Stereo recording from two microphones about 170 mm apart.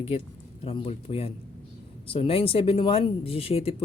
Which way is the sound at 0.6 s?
35° left (ahead or behind).